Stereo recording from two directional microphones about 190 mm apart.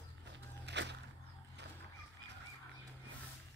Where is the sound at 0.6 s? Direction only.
65° right (ahead or behind).